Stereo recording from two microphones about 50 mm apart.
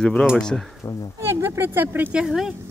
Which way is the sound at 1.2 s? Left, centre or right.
Right.